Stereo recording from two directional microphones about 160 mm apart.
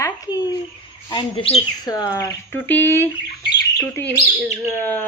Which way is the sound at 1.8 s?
20° left (ahead or behind).